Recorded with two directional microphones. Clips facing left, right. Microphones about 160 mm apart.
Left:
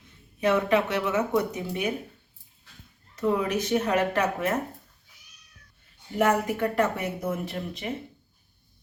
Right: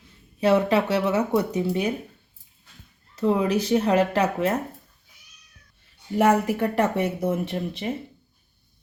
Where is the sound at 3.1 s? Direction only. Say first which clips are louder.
Right 4 dB; 30° right (ahead or behind).